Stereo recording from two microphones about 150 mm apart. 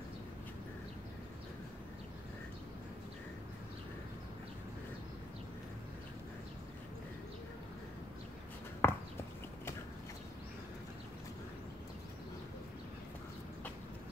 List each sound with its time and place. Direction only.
8.8 s horse: 15° left (ahead or behind)